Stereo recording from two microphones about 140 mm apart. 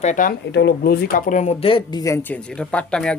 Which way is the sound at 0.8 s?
90° left.